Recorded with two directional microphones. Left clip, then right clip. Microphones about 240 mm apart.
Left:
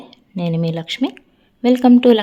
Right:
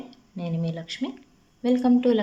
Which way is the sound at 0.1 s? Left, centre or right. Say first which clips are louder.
Left 14 dB; left.